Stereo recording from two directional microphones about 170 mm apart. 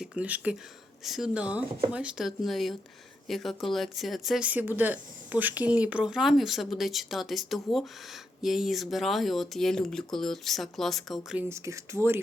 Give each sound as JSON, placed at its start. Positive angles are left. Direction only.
{"t": 0.0, "sound": "speech", "side_deg": -5}
{"t": 11.4, "sound": "speech", "side_deg": -15}